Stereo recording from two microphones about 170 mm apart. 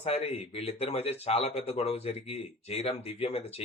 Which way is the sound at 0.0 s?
35° left (ahead or behind).